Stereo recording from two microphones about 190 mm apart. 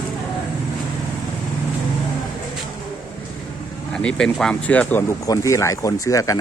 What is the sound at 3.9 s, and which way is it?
Speech, 5° left (ahead or behind).